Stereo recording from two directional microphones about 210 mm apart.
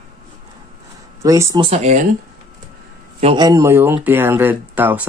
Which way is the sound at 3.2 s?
25° right (ahead or behind).